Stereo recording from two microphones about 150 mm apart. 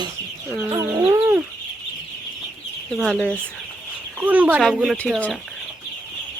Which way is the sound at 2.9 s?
5° left (ahead or behind).